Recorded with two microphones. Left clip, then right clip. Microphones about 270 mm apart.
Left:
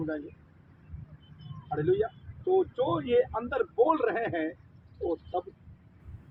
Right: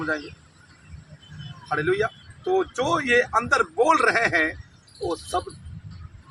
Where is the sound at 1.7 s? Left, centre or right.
Right.